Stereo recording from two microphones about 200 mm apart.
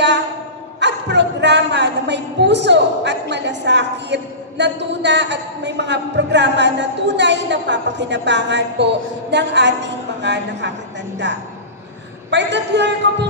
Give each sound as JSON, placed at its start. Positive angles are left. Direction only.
{"t": 0.7, "sound": "a woman's voice", "side_deg": -60}
{"t": 12.3, "sound": "a man's voice", "side_deg": -60}